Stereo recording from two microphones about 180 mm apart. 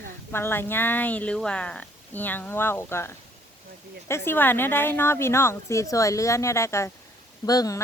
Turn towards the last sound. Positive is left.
turn(degrees=20)  # may be behind; listen again after turning